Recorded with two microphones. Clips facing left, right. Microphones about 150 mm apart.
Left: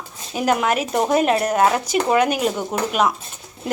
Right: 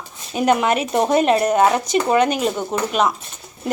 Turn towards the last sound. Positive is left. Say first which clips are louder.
# right 1 dB
turn(degrees=5)  # may be behind; listen again after turning